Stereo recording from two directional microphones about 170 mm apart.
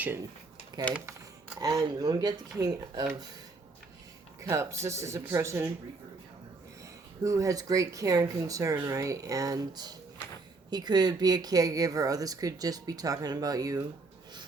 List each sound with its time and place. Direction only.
0.0 s speech: 15° right (ahead or behind)
0.9 s speech: 10° left (ahead or behind)
1.5 s a woman's voice: 20° right (ahead or behind)
4.4 s speech: 15° right (ahead or behind)
7.2 s a woman's voice: 20° right (ahead or behind)